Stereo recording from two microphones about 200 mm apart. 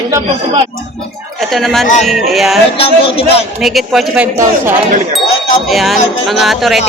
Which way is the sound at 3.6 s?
Centre (ahead or behind).